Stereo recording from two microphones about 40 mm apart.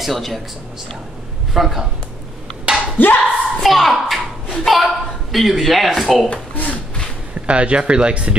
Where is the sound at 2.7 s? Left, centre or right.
Right.